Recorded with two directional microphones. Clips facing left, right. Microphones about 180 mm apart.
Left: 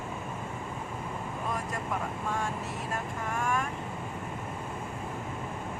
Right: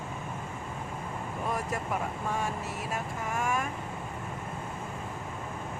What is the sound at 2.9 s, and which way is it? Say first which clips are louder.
Speech: right 1 dB; 5° right (ahead or behind).